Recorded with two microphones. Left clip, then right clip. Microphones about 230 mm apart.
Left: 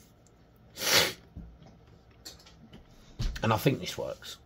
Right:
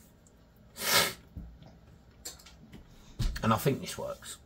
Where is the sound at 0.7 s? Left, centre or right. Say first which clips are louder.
Left 2 dB; left.